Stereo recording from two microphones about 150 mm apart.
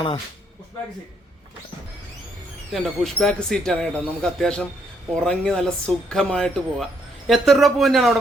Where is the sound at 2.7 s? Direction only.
Centre (ahead or behind).